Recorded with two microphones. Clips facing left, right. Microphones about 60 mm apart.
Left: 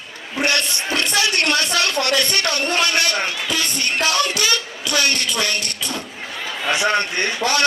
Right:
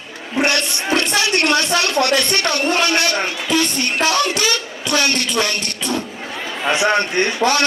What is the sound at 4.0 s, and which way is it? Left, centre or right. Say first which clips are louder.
A man's voice: right 3 dB; right.